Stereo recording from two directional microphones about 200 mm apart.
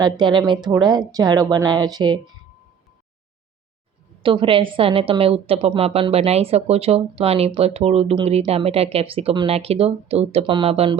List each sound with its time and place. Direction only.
0.0 s a woman's voice: 20° right (ahead or behind)
4.2 s a woman's voice: 25° right (ahead or behind)